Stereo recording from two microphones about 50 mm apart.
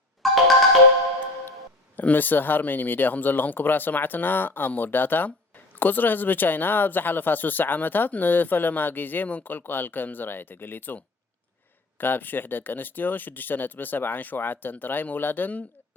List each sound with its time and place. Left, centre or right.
0.2 s music: centre
2.0 s speech: left